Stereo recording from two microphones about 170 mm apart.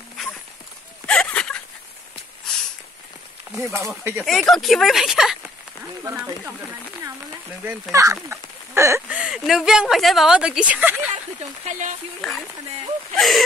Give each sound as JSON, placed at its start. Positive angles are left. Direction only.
{"t": 1.0, "sound": "a sound", "side_deg": 5}
{"t": 3.5, "sound": "speech", "side_deg": -15}
{"t": 4.3, "sound": "speech", "side_deg": 0}
{"t": 6.0, "sound": "speech", "side_deg": -15}
{"t": 9.2, "sound": "speech", "side_deg": 0}
{"t": 11.6, "sound": "speech", "side_deg": -45}
{"t": 12.2, "sound": "speech", "side_deg": 0}